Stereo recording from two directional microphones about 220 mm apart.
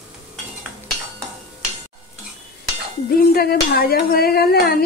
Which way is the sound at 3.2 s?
45° left (ahead or behind).